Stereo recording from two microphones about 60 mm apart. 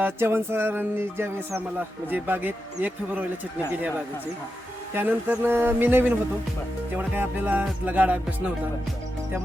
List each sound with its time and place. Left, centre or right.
0.0 s music: right
2.0 s speech: right
4.9 s music: right
6.9 s speech: right